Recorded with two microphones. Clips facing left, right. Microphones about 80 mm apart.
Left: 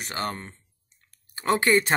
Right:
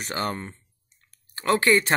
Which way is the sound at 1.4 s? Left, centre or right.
Centre.